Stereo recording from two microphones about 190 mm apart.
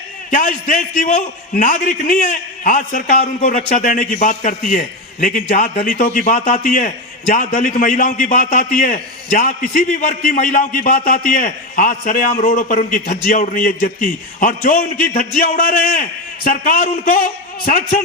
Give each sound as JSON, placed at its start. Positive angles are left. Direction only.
{"t": 0.3, "sound": "a man's voice", "side_deg": 45}